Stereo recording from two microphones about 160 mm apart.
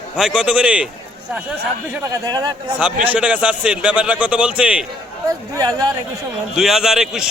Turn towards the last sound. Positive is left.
turn(degrees=-5)  # may be behind; listen again after turning